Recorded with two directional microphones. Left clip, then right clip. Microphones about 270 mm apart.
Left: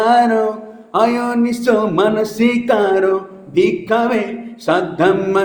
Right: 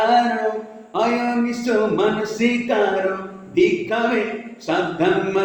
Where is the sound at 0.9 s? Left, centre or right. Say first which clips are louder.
Left 5 dB; left.